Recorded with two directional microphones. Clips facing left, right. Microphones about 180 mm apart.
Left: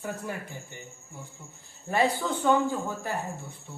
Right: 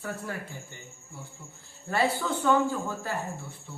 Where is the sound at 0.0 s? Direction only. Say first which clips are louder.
Left 1 dB; 20° left (ahead or behind).